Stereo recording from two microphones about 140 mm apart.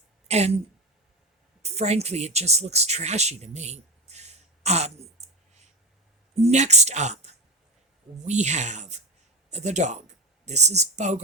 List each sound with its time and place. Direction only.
0.3 s speech: 50° right (ahead or behind)
1.7 s speech: 50° right (ahead or behind)